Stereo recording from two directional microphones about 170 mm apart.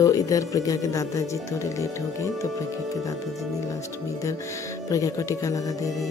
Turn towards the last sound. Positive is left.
turn(degrees=20)  # may be behind; listen again after turning